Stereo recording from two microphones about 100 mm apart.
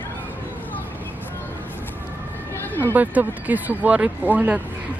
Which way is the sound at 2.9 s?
15° right (ahead or behind).